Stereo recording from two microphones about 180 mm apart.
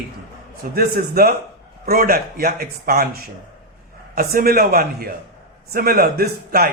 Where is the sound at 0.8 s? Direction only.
55° right (ahead or behind).